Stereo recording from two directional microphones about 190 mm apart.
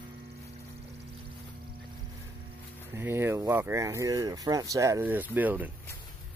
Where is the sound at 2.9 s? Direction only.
10° right (ahead or behind).